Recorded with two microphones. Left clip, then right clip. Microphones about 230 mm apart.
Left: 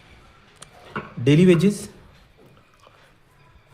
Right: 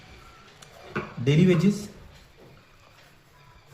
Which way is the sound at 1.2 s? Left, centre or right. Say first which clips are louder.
Left 6 dB; left.